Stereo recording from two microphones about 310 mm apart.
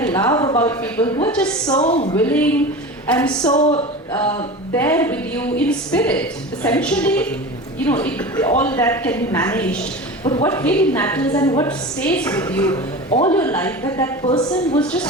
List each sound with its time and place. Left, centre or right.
0.0 s a woman's voice: centre
1.8 s a woman's voice: centre
3.5 s a woman's voice: centre